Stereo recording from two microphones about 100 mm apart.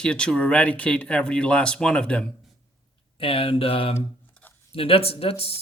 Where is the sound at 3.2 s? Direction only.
65° left (ahead or behind).